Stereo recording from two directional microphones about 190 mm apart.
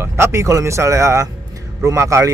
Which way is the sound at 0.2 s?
15° right (ahead or behind).